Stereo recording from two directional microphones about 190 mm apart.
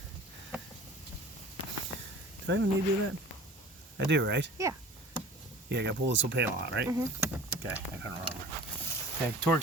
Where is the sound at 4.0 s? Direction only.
70° right (ahead or behind).